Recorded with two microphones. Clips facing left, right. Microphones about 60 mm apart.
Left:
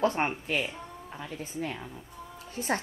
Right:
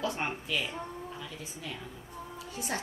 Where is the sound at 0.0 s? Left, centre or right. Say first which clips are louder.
Left 6 dB; left.